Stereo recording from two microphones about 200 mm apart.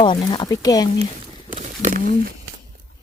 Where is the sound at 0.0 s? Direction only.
20° left (ahead or behind).